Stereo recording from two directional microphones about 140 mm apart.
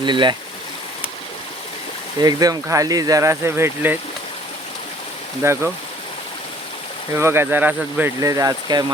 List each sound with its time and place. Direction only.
0.0 s speech: 35° right (ahead or behind)
2.2 s speech: 25° right (ahead or behind)
5.4 s speech: 20° right (ahead or behind)
7.1 s speech: 20° right (ahead or behind)
8.2 s speech: 25° right (ahead or behind)